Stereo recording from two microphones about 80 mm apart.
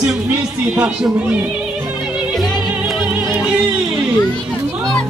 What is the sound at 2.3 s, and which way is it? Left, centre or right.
Music, centre.